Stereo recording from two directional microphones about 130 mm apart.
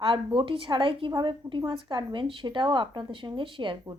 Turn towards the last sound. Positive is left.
turn(degrees=-40)  # may be behind; listen again after turning